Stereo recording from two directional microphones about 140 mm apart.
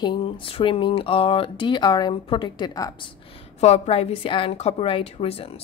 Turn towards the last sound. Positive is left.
turn(degrees=45)  # may be behind; listen again after turning